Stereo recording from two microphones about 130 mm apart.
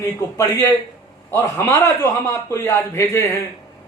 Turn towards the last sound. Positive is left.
turn(degrees=20)  # may be behind; listen again after turning